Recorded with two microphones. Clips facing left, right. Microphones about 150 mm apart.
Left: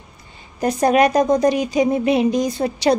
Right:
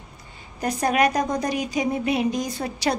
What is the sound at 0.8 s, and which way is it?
A woman's voice, 25° left (ahead or behind).